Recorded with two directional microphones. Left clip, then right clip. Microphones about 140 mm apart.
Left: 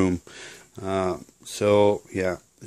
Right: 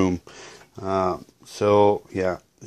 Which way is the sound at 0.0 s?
20° left (ahead or behind).